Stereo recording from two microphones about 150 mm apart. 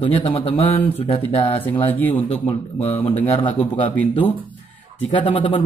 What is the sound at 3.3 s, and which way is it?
Speech, 40° left (ahead or behind).